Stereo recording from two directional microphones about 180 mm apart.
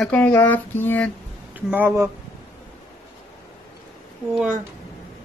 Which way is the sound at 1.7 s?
10° right (ahead or behind).